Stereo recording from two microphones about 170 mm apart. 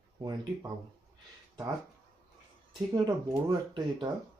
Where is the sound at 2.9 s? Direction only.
25° right (ahead or behind).